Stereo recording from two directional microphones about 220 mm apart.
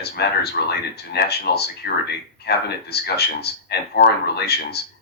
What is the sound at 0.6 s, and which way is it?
Speech, 45° left (ahead or behind).